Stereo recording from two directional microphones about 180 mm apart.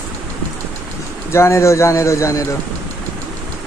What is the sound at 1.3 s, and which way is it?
Speech, 15° left (ahead or behind).